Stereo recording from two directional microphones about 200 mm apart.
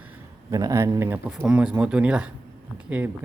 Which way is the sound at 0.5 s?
15° right (ahead or behind).